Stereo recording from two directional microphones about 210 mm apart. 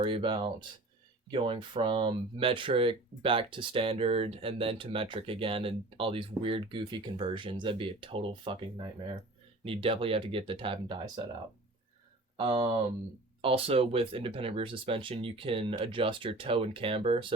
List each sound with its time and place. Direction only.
0.0 s speech: 25° right (ahead or behind)
9.6 s speech: 25° right (ahead or behind)
12.4 s speech: 25° right (ahead or behind)